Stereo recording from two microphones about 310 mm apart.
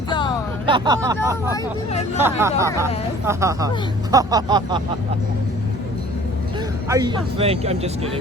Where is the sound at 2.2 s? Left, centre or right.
Centre.